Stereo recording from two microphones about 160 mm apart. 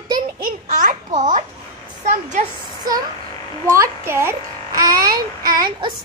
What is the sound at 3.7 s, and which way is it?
A child's voice, 15° right (ahead or behind).